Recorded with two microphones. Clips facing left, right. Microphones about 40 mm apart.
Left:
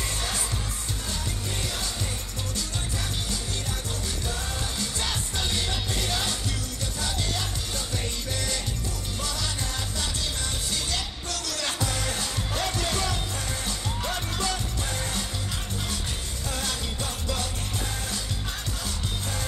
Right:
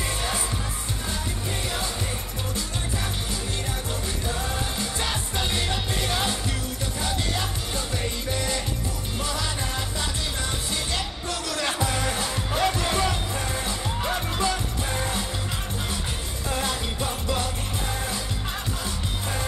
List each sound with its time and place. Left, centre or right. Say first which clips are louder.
4.3 s music: right 6 dB; right
10.7 s music: right 2 dB; right
16.4 s music: right 4 dB; right